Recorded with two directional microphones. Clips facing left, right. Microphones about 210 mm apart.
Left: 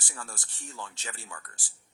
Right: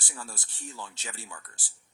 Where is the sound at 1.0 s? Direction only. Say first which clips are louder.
Even; 5° right (ahead or behind).